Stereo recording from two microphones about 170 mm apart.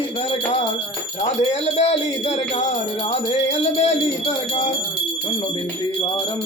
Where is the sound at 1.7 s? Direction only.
35° left (ahead or behind).